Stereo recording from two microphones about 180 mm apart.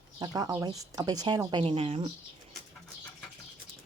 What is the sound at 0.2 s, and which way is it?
A woman's voice, 20° right (ahead or behind).